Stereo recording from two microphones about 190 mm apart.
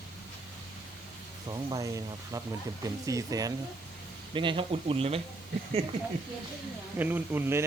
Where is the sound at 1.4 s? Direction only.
20° right (ahead or behind).